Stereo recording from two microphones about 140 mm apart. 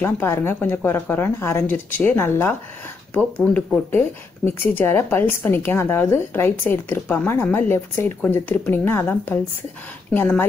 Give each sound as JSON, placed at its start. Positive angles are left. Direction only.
{"t": 0.0, "sound": "a woman's voice", "side_deg": 15}